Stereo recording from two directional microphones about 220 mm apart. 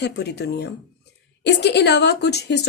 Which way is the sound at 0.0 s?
50° left (ahead or behind).